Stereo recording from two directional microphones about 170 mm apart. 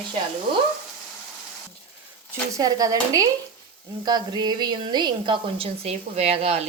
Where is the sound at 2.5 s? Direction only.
20° right (ahead or behind); by 6.6 s 35° right (ahead or behind).